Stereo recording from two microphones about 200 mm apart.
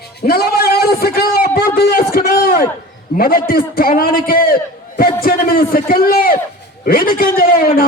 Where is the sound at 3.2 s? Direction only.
45° left (ahead or behind).